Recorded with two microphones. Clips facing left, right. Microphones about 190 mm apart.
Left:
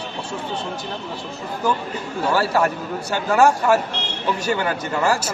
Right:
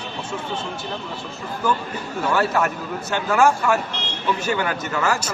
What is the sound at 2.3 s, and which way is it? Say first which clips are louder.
A man's voice: left 1 dB; 35° left (ahead or behind).